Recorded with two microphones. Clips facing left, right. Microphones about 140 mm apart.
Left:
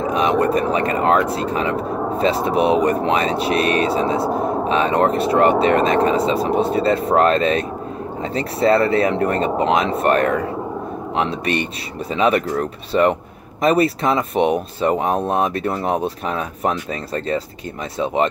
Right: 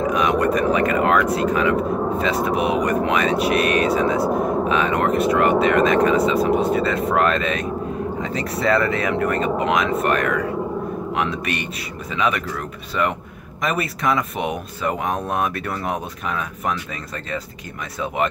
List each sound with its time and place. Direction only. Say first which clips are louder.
0.0 s speech: left 1 dB; 30° left (ahead or behind)